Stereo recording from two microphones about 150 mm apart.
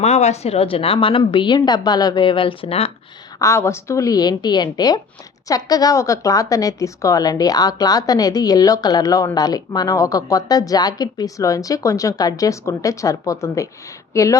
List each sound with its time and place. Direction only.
0.0 s a woman's voice: 45° left (ahead or behind)
3.3 s a woman's voice: 20° left (ahead or behind)